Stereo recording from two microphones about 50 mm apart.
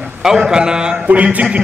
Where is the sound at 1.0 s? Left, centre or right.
Right.